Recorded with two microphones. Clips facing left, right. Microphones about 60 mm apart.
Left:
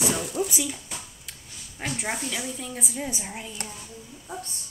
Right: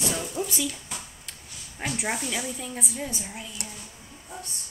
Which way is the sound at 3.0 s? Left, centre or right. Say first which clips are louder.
Left 2 dB; left.